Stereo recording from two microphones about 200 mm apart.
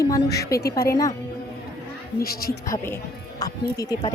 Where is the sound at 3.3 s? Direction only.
15° left (ahead or behind).